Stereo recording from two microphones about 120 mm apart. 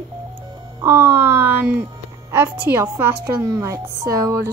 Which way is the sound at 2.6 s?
20° right (ahead or behind).